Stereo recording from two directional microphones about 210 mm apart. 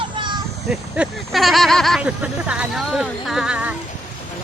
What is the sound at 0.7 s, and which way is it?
Speech, centre (ahead or behind).